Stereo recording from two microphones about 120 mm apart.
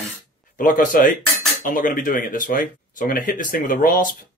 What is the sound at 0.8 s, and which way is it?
Speech, 90° left.